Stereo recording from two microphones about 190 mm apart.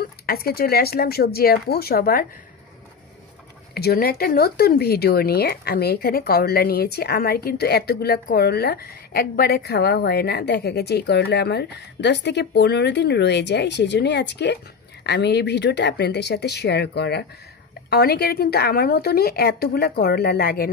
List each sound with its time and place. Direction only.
0.3 s speech: 55° left (ahead or behind)
3.7 s speech: 55° left (ahead or behind)